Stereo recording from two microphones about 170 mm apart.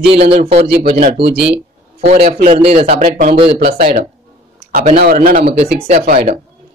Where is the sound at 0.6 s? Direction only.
65° right (ahead or behind).